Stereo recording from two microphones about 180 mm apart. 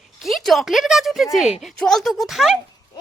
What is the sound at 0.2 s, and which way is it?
A woman's voice, centre (ahead or behind).